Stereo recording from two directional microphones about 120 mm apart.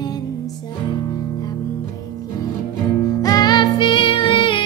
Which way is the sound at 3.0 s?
30° left (ahead or behind).